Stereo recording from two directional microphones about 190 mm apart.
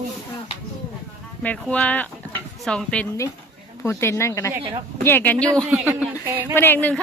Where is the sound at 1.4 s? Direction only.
5° left (ahead or behind).